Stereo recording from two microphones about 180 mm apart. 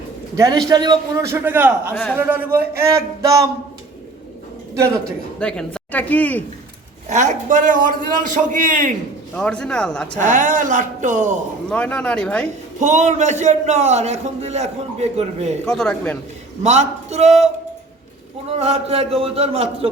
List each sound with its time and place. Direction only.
0.3 s a man's voice: 20° right (ahead or behind)
1.9 s speech: 10° left (ahead or behind)
2.1 s speech: 10° right (ahead or behind)
5.4 s speech: 5° left (ahead or behind)
7.1 s a man's voice: 40° right (ahead or behind)
9.3 s speech: 5° left (ahead or behind)
10.2 s a man's voice: 45° right (ahead or behind)
11.7 s speech: 5° left (ahead or behind)
12.8 s a man's voice: 40° right (ahead or behind)
15.6 s speech: 5° left (ahead or behind)
16.6 s a man's voice: 40° right (ahead or behind)